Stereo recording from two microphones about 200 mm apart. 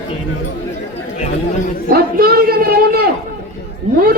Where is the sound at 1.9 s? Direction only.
50° right (ahead or behind).